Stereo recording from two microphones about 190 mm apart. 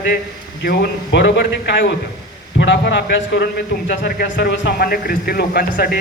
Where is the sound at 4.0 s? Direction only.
50° left (ahead or behind).